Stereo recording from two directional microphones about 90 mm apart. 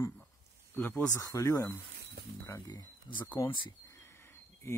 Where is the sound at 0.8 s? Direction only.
20° left (ahead or behind).